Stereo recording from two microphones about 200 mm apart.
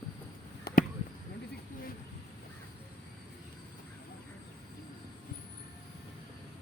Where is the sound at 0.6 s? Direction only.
45° left (ahead or behind).